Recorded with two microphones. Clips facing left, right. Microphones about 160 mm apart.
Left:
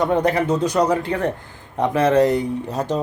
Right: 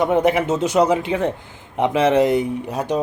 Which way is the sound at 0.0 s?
20° right (ahead or behind).